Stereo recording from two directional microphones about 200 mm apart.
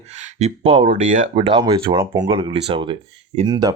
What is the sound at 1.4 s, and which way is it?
Speech, 25° right (ahead or behind).